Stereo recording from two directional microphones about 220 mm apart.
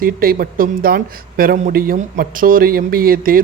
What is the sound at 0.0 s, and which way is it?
Speech, 40° right (ahead or behind).